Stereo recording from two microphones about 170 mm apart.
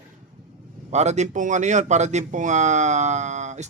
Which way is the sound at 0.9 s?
40° right (ahead or behind).